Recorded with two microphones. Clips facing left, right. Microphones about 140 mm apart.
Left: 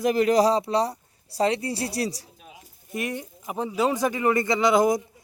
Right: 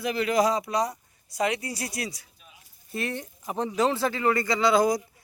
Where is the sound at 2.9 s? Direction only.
15° left (ahead or behind).